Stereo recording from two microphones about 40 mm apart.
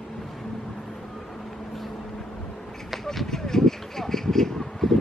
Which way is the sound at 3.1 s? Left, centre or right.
Centre.